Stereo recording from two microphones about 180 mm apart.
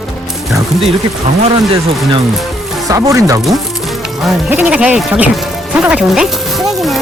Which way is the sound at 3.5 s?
Centre (ahead or behind).